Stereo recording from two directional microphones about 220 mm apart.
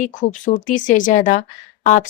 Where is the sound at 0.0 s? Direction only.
35° left (ahead or behind).